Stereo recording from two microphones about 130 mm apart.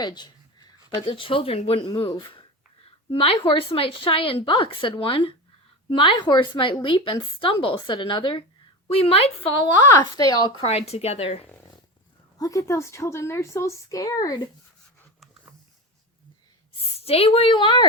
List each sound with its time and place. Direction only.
0.0 s speech: 35° left (ahead or behind)
10.0 s speech: 30° left (ahead or behind)
10.6 s speech: 50° left (ahead or behind)
12.4 s a woman's voice: 25° left (ahead or behind)
17.0 s speech: 50° left (ahead or behind)